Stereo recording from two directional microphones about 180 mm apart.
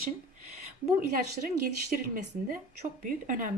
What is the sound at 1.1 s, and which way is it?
Speech, 50° right (ahead or behind).